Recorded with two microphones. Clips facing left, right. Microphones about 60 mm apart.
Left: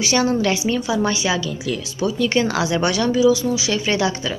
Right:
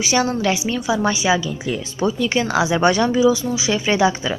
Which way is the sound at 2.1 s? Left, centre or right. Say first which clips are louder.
Left 1 dB; centre.